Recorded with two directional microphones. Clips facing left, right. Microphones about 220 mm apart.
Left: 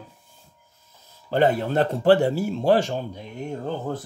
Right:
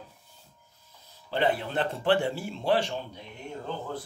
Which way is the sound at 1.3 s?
45° left (ahead or behind).